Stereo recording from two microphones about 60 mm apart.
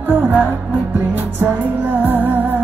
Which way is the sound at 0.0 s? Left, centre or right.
Right.